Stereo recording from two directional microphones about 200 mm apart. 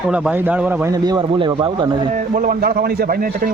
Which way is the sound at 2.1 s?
40° right (ahead or behind).